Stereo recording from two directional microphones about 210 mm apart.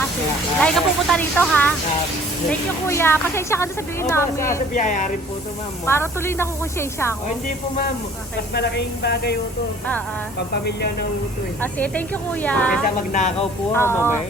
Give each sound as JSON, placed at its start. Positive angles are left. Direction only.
{"t": 0.6, "sound": "speech", "side_deg": 5}
{"t": 4.7, "sound": "speech", "side_deg": 40}
{"t": 5.8, "sound": "speech", "side_deg": 10}
{"t": 8.5, "sound": "speech", "side_deg": 50}
{"t": 10.7, "sound": "speech", "side_deg": 50}
{"t": 11.6, "sound": "speech", "side_deg": 5}